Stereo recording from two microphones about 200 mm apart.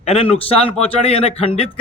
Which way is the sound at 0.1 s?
30° left (ahead or behind).